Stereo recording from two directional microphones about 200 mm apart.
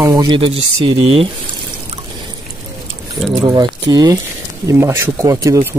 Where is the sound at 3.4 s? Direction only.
20° right (ahead or behind).